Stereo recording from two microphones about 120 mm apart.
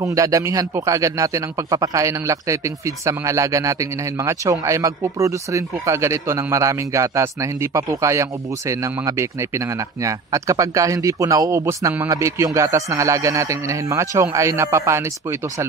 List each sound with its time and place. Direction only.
0.0 s speech: 25° right (ahead or behind)